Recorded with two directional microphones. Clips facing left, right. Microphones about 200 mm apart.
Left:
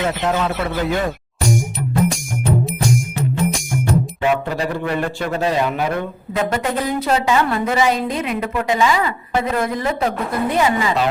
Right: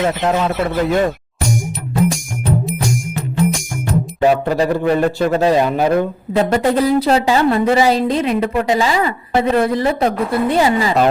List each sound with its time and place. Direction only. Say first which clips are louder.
0.0 s speech: right 3 dB; centre (ahead or behind)
4.2 s a woman's voice: right 5 dB; 40° right (ahead or behind)